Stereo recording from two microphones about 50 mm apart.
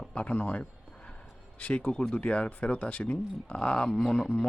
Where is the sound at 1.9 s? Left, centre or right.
Centre.